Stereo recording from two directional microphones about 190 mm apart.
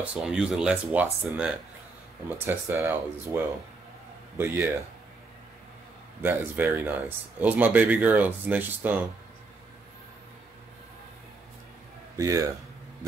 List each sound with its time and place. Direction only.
0.0 s speech: 5° right (ahead or behind)
4.4 s speech: 10° right (ahead or behind)
6.2 s speech: 10° right (ahead or behind)
12.2 s speech: 15° right (ahead or behind)